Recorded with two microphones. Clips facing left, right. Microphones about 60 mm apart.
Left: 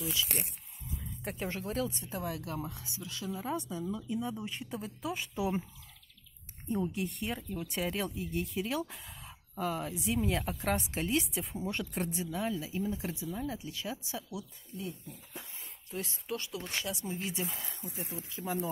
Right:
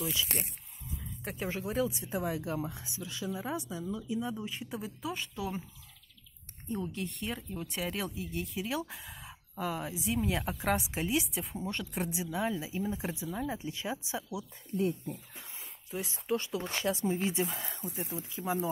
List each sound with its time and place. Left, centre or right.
1.2 s speech: centre
2.1 s speech: right
3.3 s speech: centre
5.3 s speech: centre
6.7 s speech: centre; by 14.4 s right
14.7 s speech: right
15.6 s a sound: centre
16.3 s speech: right
18.3 s speech: centre